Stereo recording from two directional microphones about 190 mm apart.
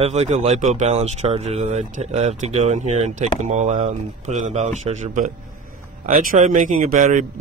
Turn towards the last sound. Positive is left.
turn(degrees=-45)  # may be behind; listen again after turning